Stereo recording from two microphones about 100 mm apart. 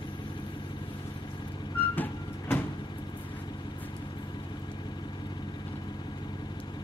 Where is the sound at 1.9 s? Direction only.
20° left (ahead or behind).